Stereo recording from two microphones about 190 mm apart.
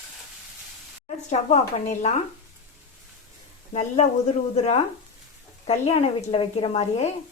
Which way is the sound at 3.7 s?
35° left (ahead or behind).